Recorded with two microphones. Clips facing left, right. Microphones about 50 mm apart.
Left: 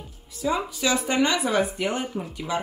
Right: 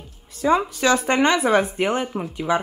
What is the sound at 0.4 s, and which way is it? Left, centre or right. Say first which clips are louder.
Speech: right 6 dB; right.